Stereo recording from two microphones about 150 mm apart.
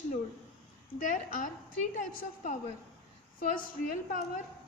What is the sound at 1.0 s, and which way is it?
A woman's voice, 60° left (ahead or behind).